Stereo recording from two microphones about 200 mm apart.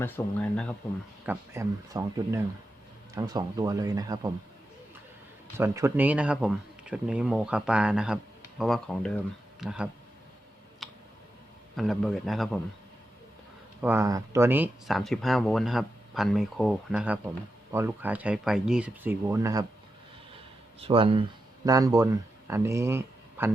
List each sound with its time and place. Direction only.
0.0 s speech: 5° left (ahead or behind)
1.2 s speech: 10° right (ahead or behind)
5.5 s speech: 15° right (ahead or behind)
10.8 s tick: centre (ahead or behind)
11.8 s speech: centre (ahead or behind)
13.8 s speech: 15° right (ahead or behind)
20.7 s speech: 30° right (ahead or behind); by 23.5 s 15° right (ahead or behind)